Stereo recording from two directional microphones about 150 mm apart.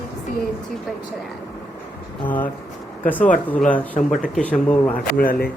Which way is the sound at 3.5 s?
10° left (ahead or behind).